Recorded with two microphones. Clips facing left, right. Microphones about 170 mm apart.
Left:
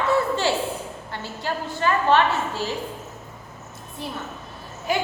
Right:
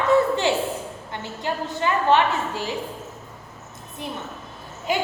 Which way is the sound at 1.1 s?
20° right (ahead or behind).